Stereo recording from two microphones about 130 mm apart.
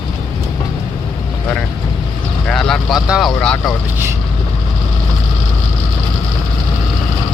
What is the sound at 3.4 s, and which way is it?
Speech, 5° left (ahead or behind).